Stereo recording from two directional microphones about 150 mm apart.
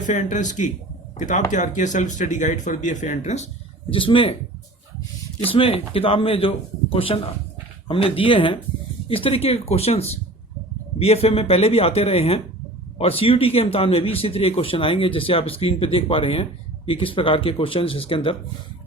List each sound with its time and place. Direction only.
0.1 s speech: 55° left (ahead or behind); by 4.4 s 35° left (ahead or behind)
5.5 s speech: 40° left (ahead or behind)